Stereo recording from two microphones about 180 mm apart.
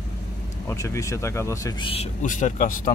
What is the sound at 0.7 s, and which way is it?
Speech, 15° left (ahead or behind).